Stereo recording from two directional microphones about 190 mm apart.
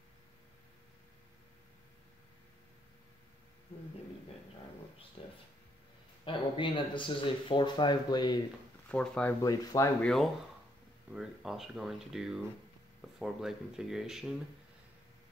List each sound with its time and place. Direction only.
5.2 s a sound: 30° left (ahead or behind)
6.2 s speech: 25° left (ahead or behind)
8.9 s speech: 5° left (ahead or behind)
9.4 s speech: 20° left (ahead or behind)
10.0 s speech: centre (ahead or behind)